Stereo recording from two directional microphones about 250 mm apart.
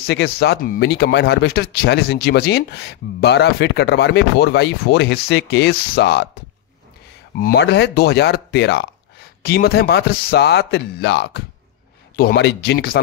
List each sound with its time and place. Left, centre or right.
0.0 s a man's voice: left
7.3 s a man's voice: left